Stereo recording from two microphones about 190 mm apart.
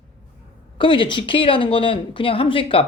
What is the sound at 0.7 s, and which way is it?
Speech, 25° left (ahead or behind).